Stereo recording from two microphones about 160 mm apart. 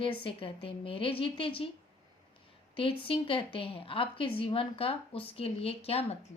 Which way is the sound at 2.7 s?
35° left (ahead or behind).